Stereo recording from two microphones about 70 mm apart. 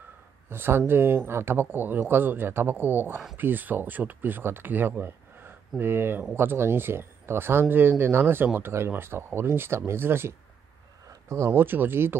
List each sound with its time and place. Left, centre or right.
0.5 s speech: right
11.1 s a sound: right
11.5 s speech: right